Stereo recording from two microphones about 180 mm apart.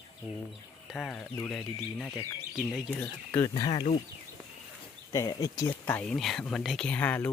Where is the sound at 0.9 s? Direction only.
Centre (ahead or behind).